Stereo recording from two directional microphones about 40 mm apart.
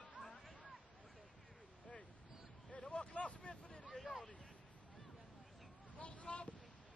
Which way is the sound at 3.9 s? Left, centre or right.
Centre.